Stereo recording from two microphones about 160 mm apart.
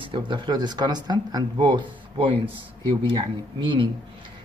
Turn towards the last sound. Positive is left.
turn(degrees=-30)  # may be behind; listen again after turning